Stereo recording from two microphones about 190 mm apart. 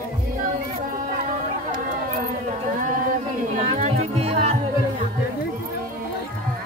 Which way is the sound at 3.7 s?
35° right (ahead or behind).